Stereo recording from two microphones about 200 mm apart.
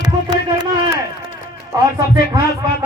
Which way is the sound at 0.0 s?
20° right (ahead or behind).